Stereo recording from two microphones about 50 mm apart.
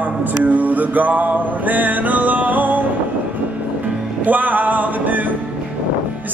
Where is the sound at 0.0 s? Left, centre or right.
Right.